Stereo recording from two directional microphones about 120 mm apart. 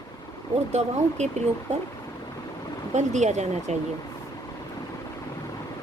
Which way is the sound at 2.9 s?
80° right.